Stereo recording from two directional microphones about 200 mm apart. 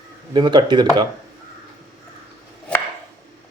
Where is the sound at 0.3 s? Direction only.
20° right (ahead or behind).